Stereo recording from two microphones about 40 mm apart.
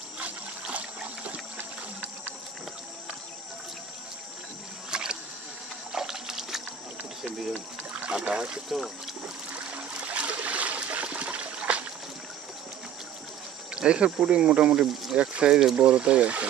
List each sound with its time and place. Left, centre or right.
0.2 s water: right
4.9 s a sound: centre
7.9 s boat: right
8.2 s speech: right
8.6 s speech: centre
9.7 s trickle: right
13.7 s speech: right